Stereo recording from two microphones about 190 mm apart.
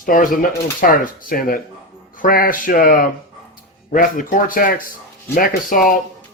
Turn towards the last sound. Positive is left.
turn(degrees=50)  # may be behind; listen again after turning